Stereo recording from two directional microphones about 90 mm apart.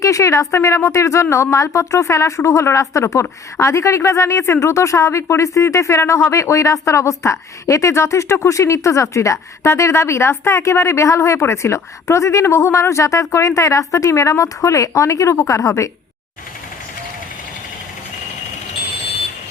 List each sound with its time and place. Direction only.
0.0 s a woman's voice: 35° left (ahead or behind)